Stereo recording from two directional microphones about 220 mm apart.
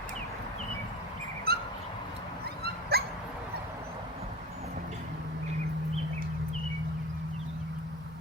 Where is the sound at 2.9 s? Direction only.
45° right (ahead or behind).